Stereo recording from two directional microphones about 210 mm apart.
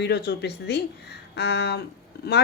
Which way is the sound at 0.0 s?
50° left (ahead or behind).